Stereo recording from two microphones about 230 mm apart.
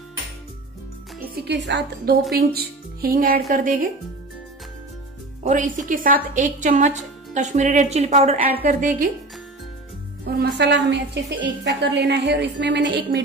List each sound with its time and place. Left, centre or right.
1.3 s a woman's voice: right
5.4 s a woman's voice: right
10.2 s a woman's voice: right